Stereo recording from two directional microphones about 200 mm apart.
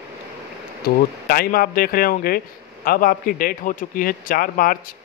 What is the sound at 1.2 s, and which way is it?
A man's voice, 50° left (ahead or behind).